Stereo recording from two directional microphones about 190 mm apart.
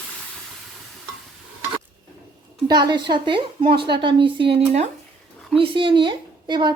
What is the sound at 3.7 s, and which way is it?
Speech, 60° right (ahead or behind).